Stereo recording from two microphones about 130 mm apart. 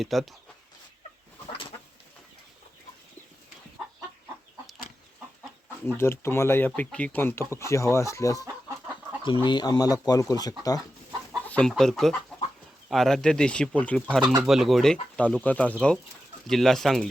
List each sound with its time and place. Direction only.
0.0 s speech: centre (ahead or behind)
5.8 s speech: 20° left (ahead or behind)
9.2 s speech: 40° left (ahead or behind)
11.4 s chicken: 10° left (ahead or behind)
11.7 s speech: 5° left (ahead or behind)
14.4 s speech: 5° right (ahead or behind)